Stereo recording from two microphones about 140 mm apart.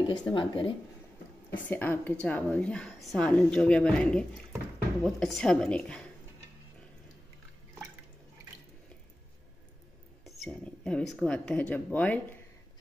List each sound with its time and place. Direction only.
0.2 s speech: 35° left (ahead or behind)
1.5 s a woman's voice: 15° left (ahead or behind)
10.2 s a woman's voice: 5° left (ahead or behind)